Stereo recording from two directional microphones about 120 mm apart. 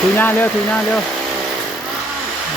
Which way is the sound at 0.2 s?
15° left (ahead or behind).